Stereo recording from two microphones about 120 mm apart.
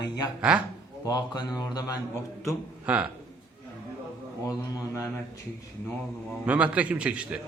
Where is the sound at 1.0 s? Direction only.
35° left (ahead or behind).